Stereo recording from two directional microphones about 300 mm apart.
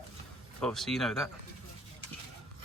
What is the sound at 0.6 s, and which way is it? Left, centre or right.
Speech, centre.